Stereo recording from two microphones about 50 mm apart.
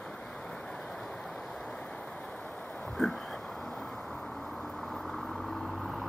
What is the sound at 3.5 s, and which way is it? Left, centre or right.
Vehicle, centre.